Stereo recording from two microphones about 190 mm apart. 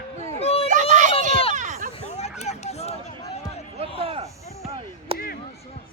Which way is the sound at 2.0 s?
35° left (ahead or behind).